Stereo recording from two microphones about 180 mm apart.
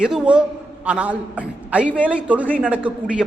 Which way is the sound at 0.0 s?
5° right (ahead or behind).